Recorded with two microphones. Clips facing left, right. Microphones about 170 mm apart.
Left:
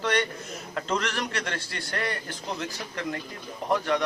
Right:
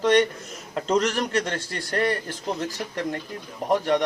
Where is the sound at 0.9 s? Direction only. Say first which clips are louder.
Right 7 dB; 40° right (ahead or behind).